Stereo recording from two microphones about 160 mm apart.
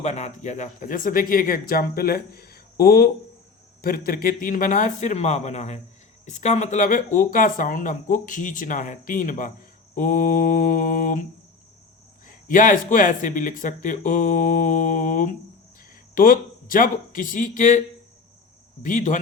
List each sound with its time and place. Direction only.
0.0 s speech: 45° left (ahead or behind)